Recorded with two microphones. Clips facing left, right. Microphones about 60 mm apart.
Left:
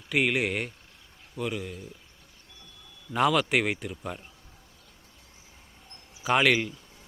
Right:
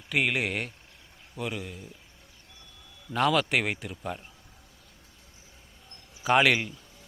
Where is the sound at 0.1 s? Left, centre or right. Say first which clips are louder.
Left 1 dB; centre.